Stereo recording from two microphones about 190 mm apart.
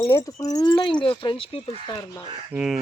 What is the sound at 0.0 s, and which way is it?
Speech, 15° left (ahead or behind).